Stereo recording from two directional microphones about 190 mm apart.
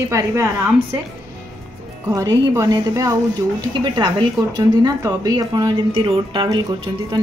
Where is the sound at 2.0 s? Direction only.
20° right (ahead or behind).